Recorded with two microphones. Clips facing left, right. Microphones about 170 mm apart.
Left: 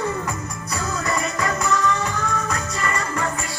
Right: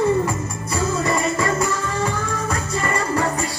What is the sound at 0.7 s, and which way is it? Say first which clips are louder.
Music: right 4 dB; 25° right (ahead or behind).